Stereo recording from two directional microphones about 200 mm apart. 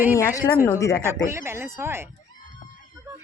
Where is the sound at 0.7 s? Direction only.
15° left (ahead or behind).